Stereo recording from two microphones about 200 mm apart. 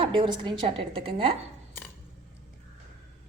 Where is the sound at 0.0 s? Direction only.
25° right (ahead or behind).